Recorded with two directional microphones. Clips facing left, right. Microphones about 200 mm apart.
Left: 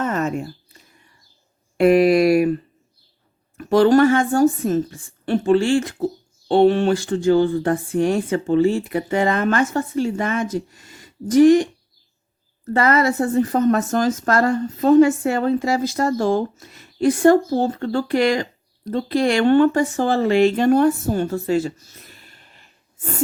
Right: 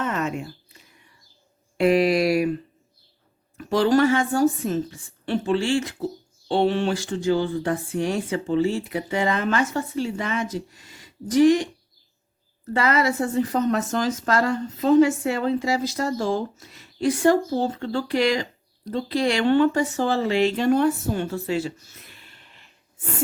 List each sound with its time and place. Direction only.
0.0 s a sound: 45° left (ahead or behind)
1.8 s speech: 55° left (ahead or behind)
3.7 s speech: 50° left (ahead or behind)
12.7 s speech: 50° left (ahead or behind)